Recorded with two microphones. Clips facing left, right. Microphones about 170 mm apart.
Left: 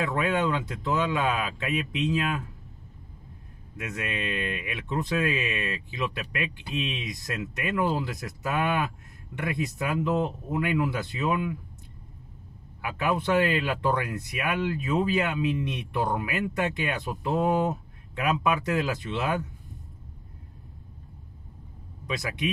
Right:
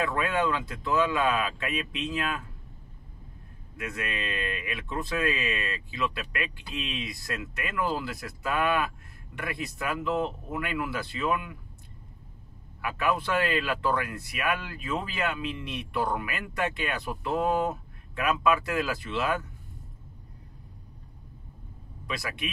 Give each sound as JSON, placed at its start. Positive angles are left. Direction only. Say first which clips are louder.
{"t": 0.0, "sound": "speech", "louder": "left 1 dB", "side_deg": 20}
{"t": 3.7, "sound": "speech", "louder": "left 1 dB", "side_deg": 20}
{"t": 12.8, "sound": "speech", "louder": "left 1 dB", "side_deg": 25}
{"t": 22.0, "sound": "speech", "louder": "left 4 dB", "side_deg": 20}